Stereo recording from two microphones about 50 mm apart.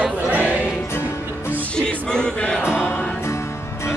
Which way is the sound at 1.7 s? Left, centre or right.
Centre.